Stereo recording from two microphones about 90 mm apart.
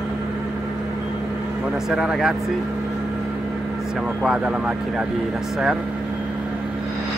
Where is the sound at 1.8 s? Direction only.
5° right (ahead or behind).